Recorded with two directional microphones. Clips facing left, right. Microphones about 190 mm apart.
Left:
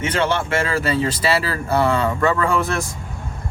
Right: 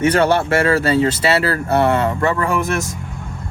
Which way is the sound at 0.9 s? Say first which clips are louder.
Right 4 dB; 25° right (ahead or behind).